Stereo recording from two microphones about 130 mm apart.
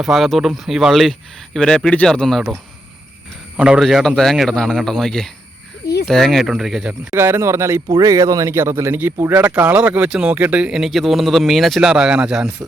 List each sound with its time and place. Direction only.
0.0 s a man's voice: centre (ahead or behind)
3.6 s a man's voice: 5° right (ahead or behind)
7.1 s speech: 20° right (ahead or behind)